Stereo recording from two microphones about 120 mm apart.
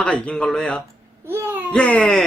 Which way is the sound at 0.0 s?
10° left (ahead or behind).